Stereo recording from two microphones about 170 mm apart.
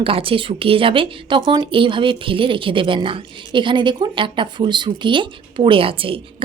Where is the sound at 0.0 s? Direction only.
35° right (ahead or behind).